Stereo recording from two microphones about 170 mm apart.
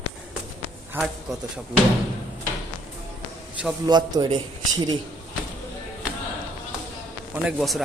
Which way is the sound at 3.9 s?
25° right (ahead or behind).